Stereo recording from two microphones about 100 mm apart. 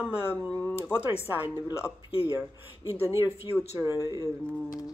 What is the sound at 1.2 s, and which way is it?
Speech, 20° right (ahead or behind).